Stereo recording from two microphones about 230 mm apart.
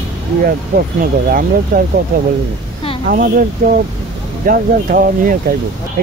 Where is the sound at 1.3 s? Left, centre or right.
Right.